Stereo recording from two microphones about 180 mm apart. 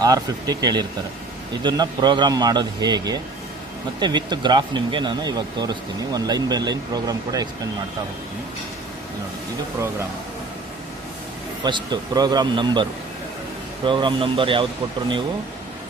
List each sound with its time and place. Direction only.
0.0 s speech: 20° right (ahead or behind)
11.6 s speech: 25° right (ahead or behind)